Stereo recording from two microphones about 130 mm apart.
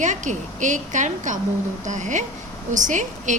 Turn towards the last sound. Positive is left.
turn(degrees=-70)  # may be behind; listen again after turning